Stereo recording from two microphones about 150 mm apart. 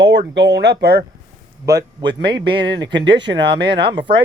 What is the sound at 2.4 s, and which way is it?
Speech, 35° right (ahead or behind).